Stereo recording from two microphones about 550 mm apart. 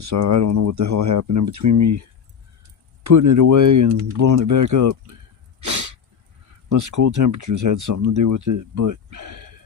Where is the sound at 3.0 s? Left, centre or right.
Right.